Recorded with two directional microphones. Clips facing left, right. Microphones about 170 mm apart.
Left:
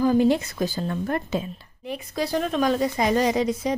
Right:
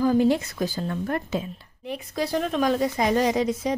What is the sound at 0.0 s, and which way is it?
A woman's voice, 20° left (ahead or behind).